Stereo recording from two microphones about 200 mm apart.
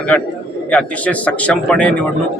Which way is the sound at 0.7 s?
5° left (ahead or behind).